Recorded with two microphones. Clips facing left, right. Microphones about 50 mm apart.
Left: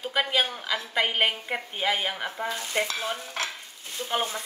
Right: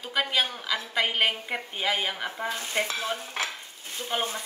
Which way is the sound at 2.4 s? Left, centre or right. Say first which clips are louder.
Left 1 dB; right.